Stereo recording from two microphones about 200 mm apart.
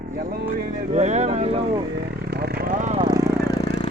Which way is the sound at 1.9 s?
55° right (ahead or behind).